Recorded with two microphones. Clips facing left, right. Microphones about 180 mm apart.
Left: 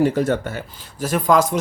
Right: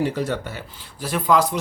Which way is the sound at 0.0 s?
50° left (ahead or behind).